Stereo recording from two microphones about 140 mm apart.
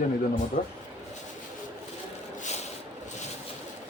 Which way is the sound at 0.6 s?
75° left (ahead or behind).